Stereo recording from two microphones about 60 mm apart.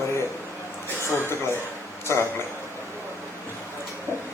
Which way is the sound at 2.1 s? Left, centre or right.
Left.